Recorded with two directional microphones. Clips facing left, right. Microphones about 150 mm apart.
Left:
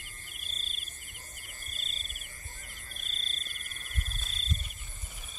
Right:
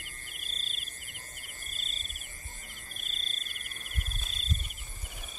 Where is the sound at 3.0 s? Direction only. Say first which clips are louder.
Left 1 dB; 40° left (ahead or behind).